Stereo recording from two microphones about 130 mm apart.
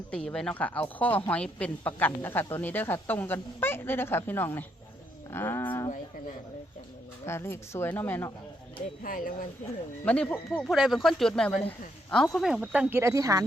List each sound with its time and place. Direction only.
0.3 s speech: 5° left (ahead or behind)
7.3 s speech: 20° left (ahead or behind)
9.0 s speech: 90° left
10.2 s speech: 10° left (ahead or behind)
10.7 s speech: centre (ahead or behind)
13.0 s speech: 25° right (ahead or behind)